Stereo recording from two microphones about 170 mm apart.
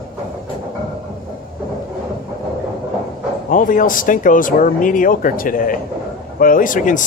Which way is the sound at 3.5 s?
50° left (ahead or behind).